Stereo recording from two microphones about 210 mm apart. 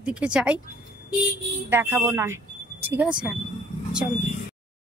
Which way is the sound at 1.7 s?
10° right (ahead or behind).